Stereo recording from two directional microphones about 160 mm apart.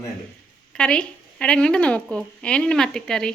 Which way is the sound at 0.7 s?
5° left (ahead or behind).